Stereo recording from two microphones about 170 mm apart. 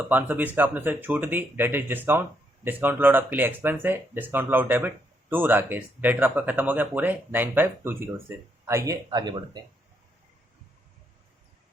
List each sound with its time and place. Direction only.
0.1 s speech: 10° right (ahead or behind)